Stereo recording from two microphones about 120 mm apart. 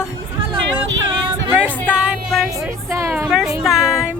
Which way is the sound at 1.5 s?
10° right (ahead or behind).